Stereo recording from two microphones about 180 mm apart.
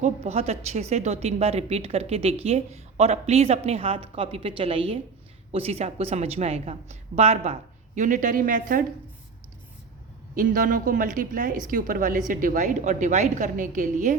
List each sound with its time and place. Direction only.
0.0 s a woman's voice: 35° right (ahead or behind)
10.3 s a woman's voice: 50° right (ahead or behind)